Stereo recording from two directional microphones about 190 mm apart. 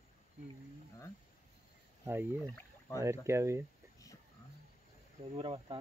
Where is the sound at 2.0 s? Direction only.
10° right (ahead or behind).